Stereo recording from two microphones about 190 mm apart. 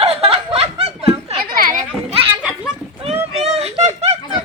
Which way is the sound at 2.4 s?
5° right (ahead or behind).